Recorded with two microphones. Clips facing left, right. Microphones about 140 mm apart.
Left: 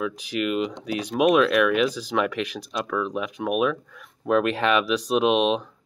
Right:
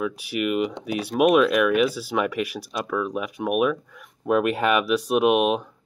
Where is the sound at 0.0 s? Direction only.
10° right (ahead or behind).